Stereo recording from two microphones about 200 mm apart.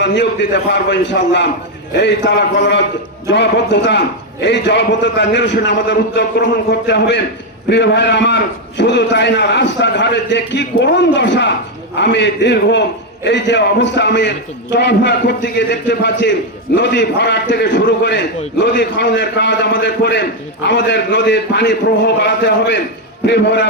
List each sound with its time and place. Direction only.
0.0 s a man's voice: 60° left (ahead or behind)